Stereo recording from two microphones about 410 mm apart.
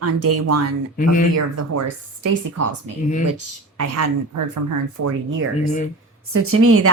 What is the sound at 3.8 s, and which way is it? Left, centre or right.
Speech, right.